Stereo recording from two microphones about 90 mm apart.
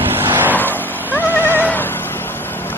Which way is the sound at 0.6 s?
20° left (ahead or behind).